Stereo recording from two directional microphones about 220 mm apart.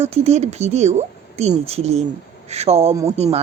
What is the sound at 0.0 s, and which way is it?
Speech, 30° right (ahead or behind).